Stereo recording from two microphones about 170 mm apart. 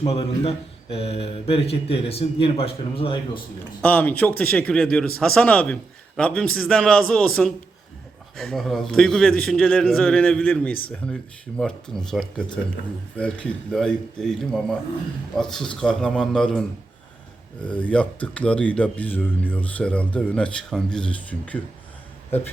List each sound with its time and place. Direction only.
0.0 s speech: 35° left (ahead or behind)
3.8 s a man's voice: 10° left (ahead or behind)
22.3 s speech: 10° left (ahead or behind)